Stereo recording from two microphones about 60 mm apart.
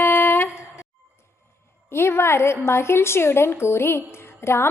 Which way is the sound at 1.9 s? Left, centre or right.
Left.